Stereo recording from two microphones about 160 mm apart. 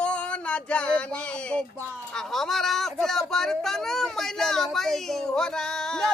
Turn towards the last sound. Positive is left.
turn(degrees=5)  # may be behind; listen again after turning